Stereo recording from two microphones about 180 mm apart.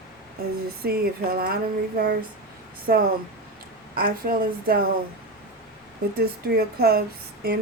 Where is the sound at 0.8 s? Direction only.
55° right (ahead or behind).